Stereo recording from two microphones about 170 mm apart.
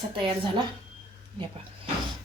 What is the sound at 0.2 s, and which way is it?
Speech, 30° right (ahead or behind).